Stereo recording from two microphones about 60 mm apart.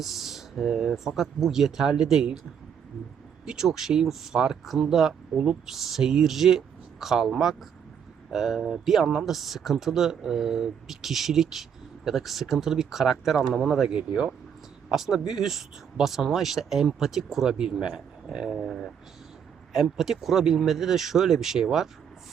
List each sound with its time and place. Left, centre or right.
0.0 s speech: centre
5.3 s speech: centre
5.7 s speech: centre
18.6 s speech: centre
19.7 s speech: centre